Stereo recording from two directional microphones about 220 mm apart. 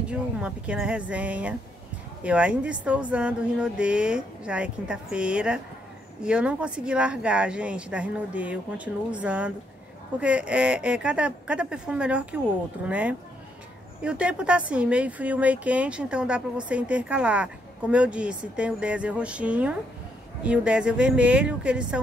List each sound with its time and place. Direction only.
0.1 s speech: 5° right (ahead or behind)